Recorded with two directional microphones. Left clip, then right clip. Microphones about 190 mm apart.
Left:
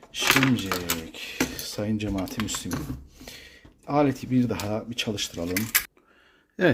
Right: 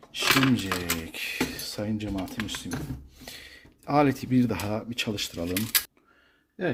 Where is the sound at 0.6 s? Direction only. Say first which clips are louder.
Left 1 dB; 5° right (ahead or behind).